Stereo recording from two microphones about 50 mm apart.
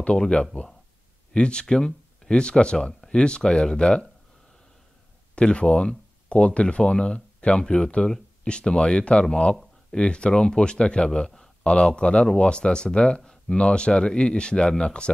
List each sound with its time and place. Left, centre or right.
0.0 s speech: left
5.3 s a man's voice: left